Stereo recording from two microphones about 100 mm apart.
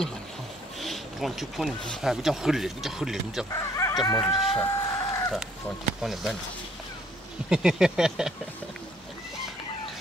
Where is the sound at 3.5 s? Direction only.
30° left (ahead or behind).